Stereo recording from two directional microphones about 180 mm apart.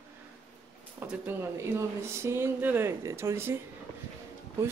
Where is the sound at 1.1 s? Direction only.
15° right (ahead or behind).